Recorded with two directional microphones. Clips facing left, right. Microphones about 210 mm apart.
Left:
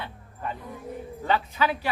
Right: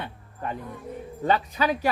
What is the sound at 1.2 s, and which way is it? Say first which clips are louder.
Speech: right 2 dB; 40° right (ahead or behind).